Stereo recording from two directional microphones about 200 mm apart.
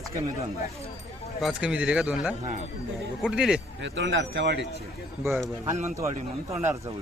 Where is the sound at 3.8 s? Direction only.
65° right (ahead or behind).